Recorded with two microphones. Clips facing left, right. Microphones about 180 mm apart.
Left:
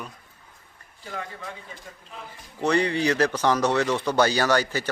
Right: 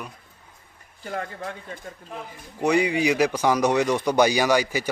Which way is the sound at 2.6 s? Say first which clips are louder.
Right 2 dB; 10° right (ahead or behind).